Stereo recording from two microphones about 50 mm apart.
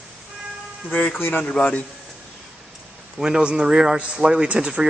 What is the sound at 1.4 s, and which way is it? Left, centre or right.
Speech, left.